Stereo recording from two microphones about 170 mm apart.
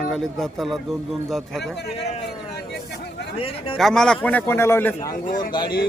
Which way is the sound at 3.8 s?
5° left (ahead or behind).